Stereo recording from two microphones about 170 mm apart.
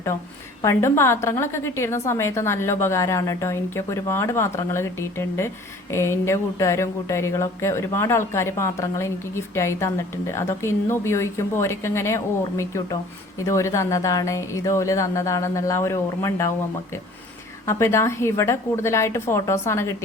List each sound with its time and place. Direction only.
0.6 s speech: 15° left (ahead or behind)
17.7 s speech: 15° left (ahead or behind)